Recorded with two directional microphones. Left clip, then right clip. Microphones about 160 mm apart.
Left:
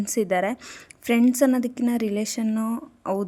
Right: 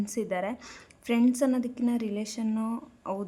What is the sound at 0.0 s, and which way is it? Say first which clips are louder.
A woman's voice: left 8 dB; 30° left (ahead or behind).